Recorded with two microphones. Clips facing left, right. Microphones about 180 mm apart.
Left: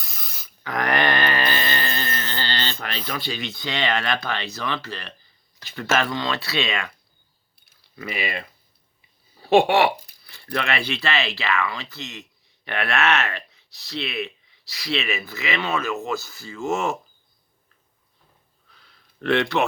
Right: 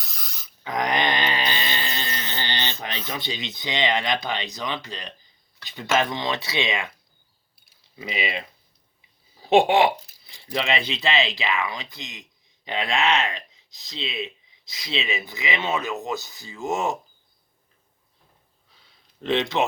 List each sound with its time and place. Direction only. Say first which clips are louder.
0.0 s a sound: left 1 dB; centre (ahead or behind)
0.6 s mantra: left 1 dB; 15° right (ahead or behind)
3.1 s speech: left 2 dB; 20° right (ahead or behind)
7.9 s speech: even; 20° right (ahead or behind)
9.5 s speech: even; 15° right (ahead or behind)
18.7 s a sound: left 3 dB; 20° right (ahead or behind)